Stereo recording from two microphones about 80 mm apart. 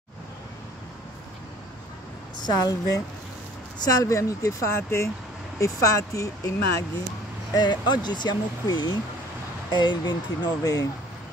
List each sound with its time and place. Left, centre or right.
2.4 s speech: left
7.5 s speech: left
9.7 s speech: left
10.6 s speech: left